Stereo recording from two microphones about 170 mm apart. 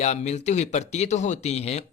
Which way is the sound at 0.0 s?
40° left (ahead or behind).